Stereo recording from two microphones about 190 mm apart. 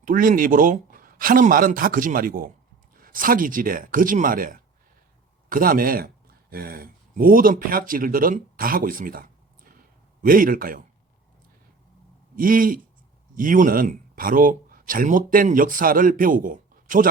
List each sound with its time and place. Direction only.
0.0 s speech: 45° right (ahead or behind)
12.4 s speech: 45° right (ahead or behind)